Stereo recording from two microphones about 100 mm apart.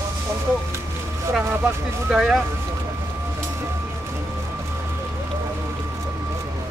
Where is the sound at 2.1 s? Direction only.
5° right (ahead or behind).